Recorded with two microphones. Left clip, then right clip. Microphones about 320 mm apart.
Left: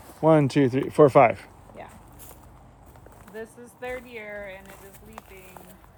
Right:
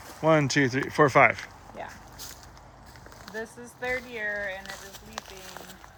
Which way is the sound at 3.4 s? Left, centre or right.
Right.